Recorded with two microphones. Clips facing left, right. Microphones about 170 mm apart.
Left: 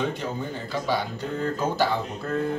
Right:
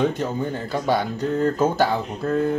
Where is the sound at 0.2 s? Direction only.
50° right (ahead or behind).